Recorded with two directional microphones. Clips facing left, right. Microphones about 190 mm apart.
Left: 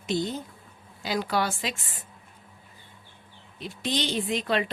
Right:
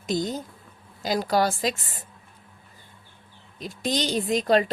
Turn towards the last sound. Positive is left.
turn(degrees=-40)  # may be behind; listen again after turning